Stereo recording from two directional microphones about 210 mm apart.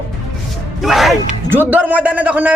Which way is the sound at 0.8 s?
Centre (ahead or behind).